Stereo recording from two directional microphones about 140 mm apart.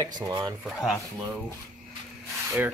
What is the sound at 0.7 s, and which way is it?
Speech, centre (ahead or behind).